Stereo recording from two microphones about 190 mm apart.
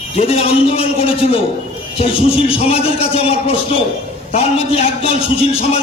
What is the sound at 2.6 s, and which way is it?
A man's voice, 35° left (ahead or behind).